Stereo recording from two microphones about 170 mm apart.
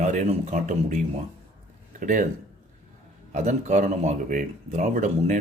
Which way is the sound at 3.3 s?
45° right (ahead or behind).